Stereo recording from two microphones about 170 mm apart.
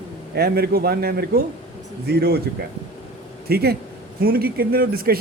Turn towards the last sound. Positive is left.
turn(degrees=-60)  # may be behind; listen again after turning